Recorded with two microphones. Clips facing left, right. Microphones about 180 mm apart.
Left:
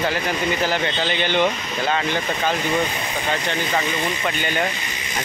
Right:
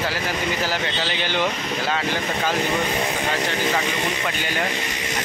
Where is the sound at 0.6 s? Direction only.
5° right (ahead or behind).